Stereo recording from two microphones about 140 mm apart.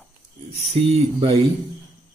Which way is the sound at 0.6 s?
45° right (ahead or behind).